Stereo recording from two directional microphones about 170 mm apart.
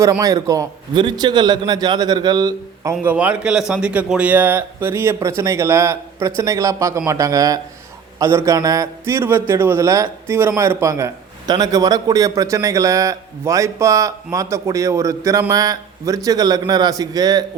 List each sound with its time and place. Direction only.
0.0 s a man's voice: 20° right (ahead or behind)
3.0 s a man's voice: 10° right (ahead or behind)